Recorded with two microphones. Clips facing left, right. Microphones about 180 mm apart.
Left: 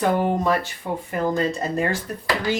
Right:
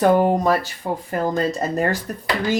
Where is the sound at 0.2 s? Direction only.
40° right (ahead or behind).